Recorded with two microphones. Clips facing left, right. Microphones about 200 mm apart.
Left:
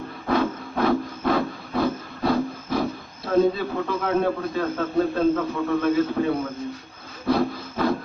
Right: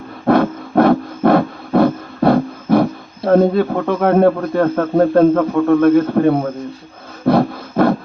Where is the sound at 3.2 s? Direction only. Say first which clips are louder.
Right 8 dB; 60° right (ahead or behind).